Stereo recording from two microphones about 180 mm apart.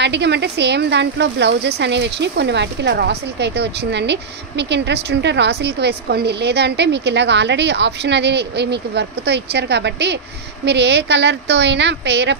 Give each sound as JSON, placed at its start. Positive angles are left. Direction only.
{"t": 0.0, "sound": "speech", "side_deg": -75}